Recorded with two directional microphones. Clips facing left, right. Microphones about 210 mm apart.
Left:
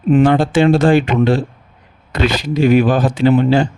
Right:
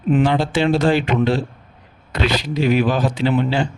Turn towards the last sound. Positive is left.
turn(degrees=45)  # may be behind; listen again after turning